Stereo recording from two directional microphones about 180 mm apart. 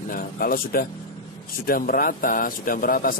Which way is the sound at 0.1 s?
55° left (ahead or behind).